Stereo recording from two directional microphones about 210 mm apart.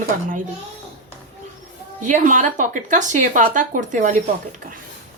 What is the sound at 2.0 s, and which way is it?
A woman's voice, 35° right (ahead or behind).